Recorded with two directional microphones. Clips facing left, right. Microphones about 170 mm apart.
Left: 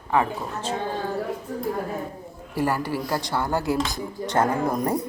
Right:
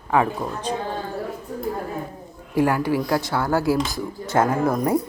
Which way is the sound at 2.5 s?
15° right (ahead or behind).